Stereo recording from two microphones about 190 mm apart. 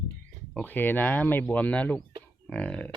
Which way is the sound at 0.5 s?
10° left (ahead or behind).